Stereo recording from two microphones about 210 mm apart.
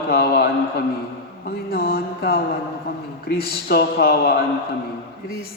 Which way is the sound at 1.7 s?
45° left (ahead or behind).